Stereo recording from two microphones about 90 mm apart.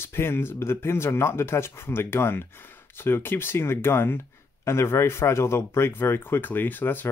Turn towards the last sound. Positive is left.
turn(degrees=20)  # may be behind; listen again after turning